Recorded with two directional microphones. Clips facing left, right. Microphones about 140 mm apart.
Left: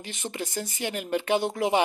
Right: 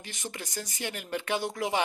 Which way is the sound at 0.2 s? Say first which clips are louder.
Left 6 dB; 25° left (ahead or behind).